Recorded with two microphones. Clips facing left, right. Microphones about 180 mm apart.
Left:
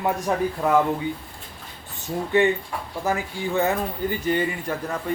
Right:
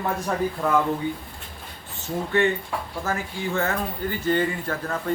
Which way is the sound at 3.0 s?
15° left (ahead or behind).